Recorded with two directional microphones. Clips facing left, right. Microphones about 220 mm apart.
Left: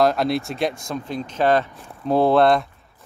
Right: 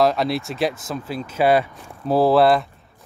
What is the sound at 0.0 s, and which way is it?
Speech, centre (ahead or behind).